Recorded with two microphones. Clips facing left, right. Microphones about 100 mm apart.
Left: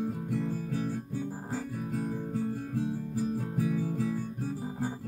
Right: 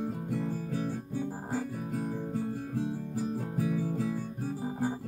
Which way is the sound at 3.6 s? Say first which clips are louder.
Even; 20° right (ahead or behind).